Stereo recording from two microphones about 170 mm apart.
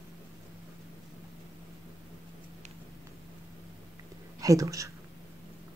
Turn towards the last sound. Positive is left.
turn(degrees=-20)  # may be behind; listen again after turning